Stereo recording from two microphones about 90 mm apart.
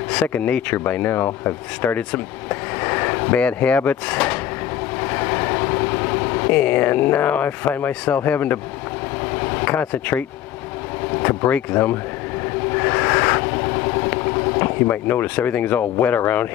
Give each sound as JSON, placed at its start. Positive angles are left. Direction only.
{"t": 0.1, "sound": "speech", "side_deg": 15}
{"t": 5.0, "sound": "vehicle", "side_deg": 25}
{"t": 9.7, "sound": "speech", "side_deg": 20}
{"t": 11.2, "sound": "speech", "side_deg": 20}
{"t": 12.7, "sound": "vehicle", "side_deg": 20}
{"t": 13.8, "sound": "speech", "side_deg": 20}